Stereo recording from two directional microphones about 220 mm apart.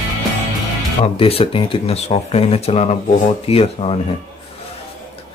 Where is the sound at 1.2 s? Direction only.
25° left (ahead or behind).